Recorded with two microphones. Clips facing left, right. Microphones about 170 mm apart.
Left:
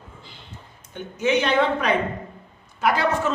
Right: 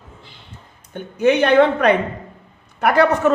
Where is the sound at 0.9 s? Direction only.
55° right (ahead or behind).